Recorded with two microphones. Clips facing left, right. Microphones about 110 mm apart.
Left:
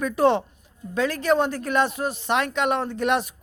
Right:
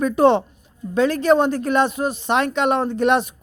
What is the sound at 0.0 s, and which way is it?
Speech, 25° right (ahead or behind).